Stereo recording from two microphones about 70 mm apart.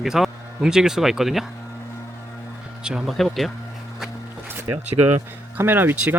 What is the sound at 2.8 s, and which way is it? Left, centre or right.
Speech, centre.